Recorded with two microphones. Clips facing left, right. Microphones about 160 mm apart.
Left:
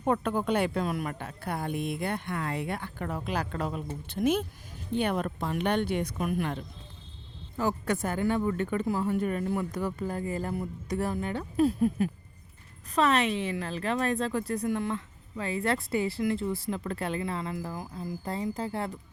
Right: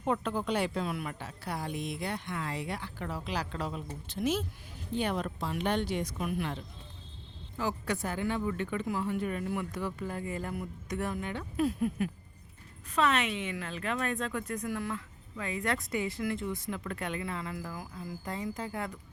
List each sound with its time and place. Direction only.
0.0 s speech: 50° left (ahead or behind); by 18.9 s 30° left (ahead or behind)